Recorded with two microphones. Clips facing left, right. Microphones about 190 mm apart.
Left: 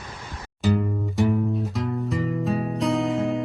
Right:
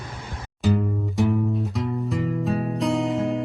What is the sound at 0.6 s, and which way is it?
Music, centre (ahead or behind).